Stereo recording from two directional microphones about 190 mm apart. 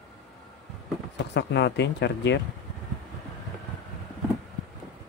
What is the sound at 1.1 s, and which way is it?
Speech, 65° left (ahead or behind).